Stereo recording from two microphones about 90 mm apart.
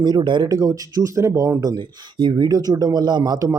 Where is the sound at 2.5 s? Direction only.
45° right (ahead or behind).